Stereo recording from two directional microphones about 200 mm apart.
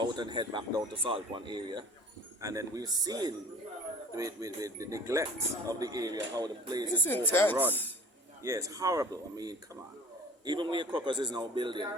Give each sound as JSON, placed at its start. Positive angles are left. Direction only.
{"t": 0.0, "sound": "speech", "side_deg": -20}
{"t": 6.9, "sound": "speech", "side_deg": 10}
{"t": 8.4, "sound": "speech", "side_deg": -15}